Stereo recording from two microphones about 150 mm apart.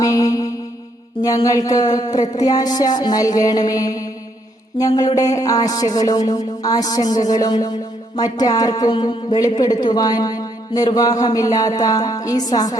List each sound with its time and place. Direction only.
0.0 s music: 25° left (ahead or behind)
1.2 s speech: 25° left (ahead or behind)